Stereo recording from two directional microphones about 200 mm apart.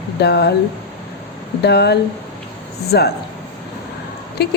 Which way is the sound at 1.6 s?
55° left (ahead or behind).